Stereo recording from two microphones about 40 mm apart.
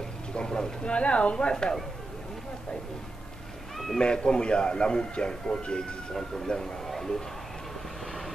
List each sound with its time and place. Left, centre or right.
0.3 s a man's voice: left
0.8 s a man's voice: left
3.7 s cat: centre
4.0 s a man's voice: left
6.9 s music: centre